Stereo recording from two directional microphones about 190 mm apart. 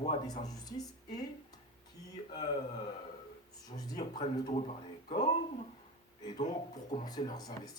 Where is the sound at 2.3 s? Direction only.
25° left (ahead or behind).